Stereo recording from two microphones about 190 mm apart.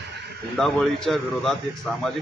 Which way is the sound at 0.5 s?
Centre (ahead or behind).